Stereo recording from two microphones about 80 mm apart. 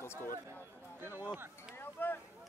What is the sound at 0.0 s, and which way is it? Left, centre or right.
Speech, left.